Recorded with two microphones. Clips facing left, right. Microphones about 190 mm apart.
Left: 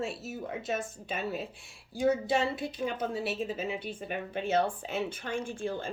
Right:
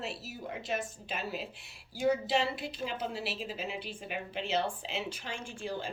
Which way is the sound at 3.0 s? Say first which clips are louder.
Left 5 dB; 50° left (ahead or behind).